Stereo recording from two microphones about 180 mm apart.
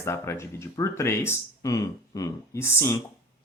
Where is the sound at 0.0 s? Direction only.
15° left (ahead or behind).